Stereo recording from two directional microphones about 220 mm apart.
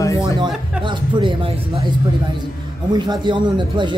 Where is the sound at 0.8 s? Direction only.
20° right (ahead or behind).